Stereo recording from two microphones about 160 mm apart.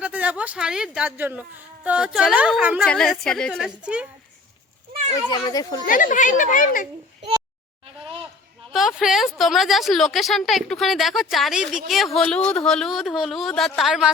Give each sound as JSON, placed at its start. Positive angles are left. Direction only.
{"t": 0.0, "sound": "speech", "side_deg": -10}
{"t": 2.8, "sound": "speech", "side_deg": 5}
{"t": 5.3, "sound": "speech", "side_deg": 25}
{"t": 5.8, "sound": "speech", "side_deg": 60}
{"t": 8.7, "sound": "speech", "side_deg": 0}